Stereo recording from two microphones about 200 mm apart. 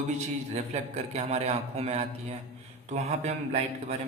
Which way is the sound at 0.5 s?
35° right (ahead or behind).